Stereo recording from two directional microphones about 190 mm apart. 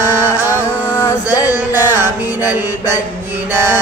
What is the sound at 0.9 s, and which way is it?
Mantra, 20° left (ahead or behind).